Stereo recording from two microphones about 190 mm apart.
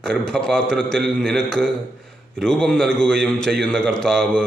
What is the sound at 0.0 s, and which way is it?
A man's voice, 5° left (ahead or behind).